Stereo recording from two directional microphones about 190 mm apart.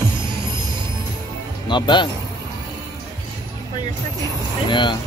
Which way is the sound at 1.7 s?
25° left (ahead or behind).